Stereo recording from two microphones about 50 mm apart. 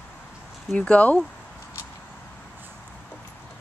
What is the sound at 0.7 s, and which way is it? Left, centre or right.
Speech, left.